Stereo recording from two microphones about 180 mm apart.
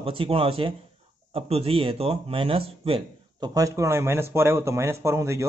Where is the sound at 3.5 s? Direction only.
20° right (ahead or behind).